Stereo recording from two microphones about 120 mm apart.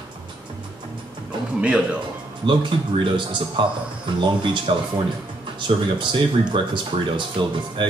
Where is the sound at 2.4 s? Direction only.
40° right (ahead or behind).